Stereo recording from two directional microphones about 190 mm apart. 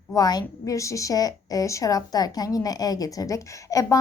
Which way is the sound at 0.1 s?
20° left (ahead or behind).